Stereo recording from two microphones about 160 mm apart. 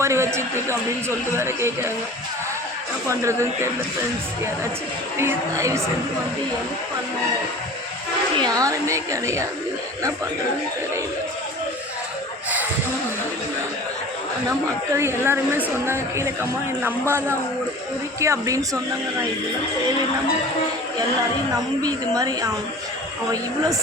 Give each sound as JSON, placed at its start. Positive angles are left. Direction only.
{"t": 0.0, "sound": "a man's voice", "side_deg": -15}
{"t": 3.1, "sound": "a woman's voice", "side_deg": -15}
{"t": 5.1, "sound": "a woman's voice", "side_deg": -15}
{"t": 8.4, "sound": "a woman's voice", "side_deg": -25}
{"t": 14.9, "sound": "a woman's voice", "side_deg": -15}
{"t": 21.8, "sound": "a woman's voice", "side_deg": -25}